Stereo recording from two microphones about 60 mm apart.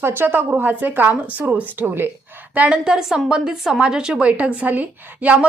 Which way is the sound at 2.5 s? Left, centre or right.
Right.